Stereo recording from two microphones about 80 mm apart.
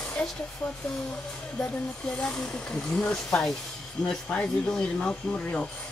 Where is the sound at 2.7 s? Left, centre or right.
Centre.